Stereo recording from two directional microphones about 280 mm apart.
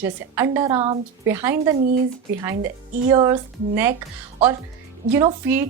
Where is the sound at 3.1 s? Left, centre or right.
Centre.